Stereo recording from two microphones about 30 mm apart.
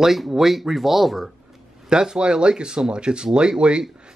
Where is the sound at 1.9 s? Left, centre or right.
Right.